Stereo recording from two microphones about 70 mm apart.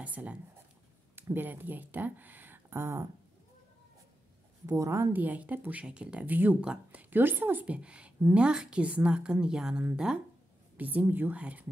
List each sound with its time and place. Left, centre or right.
0.0 s speech: right
2.8 s a woman's voice: right
4.6 s a woman's voice: right
5.1 s speech: right
7.6 s a woman's voice: centre
10.8 s speech: right